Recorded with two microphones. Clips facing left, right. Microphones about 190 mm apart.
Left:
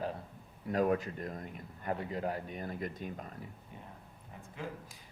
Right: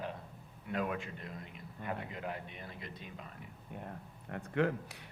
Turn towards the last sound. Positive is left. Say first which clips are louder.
# right 10 dB
turn(degrees=-70)  # may be behind; listen again after turning